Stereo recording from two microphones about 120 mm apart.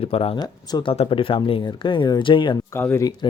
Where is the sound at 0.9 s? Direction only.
50° left (ahead or behind).